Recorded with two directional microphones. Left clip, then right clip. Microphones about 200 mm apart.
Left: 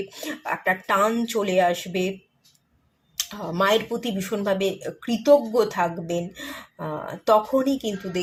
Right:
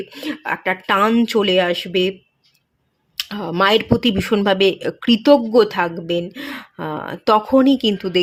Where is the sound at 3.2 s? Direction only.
40° right (ahead or behind).